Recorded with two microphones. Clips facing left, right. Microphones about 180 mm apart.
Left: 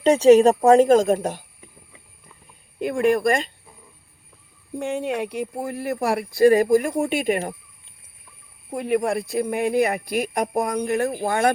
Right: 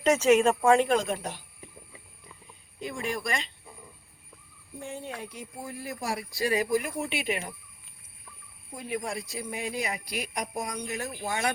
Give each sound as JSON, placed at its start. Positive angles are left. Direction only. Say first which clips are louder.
{"t": 0.0, "sound": "speech", "louder": "left 8 dB", "side_deg": 30}
{"t": 2.8, "sound": "speech", "louder": "left 14 dB", "side_deg": 60}
{"t": 4.8, "sound": "speech", "louder": "left 13 dB", "side_deg": 80}
{"t": 8.7, "sound": "speech", "louder": "left 11 dB", "side_deg": 65}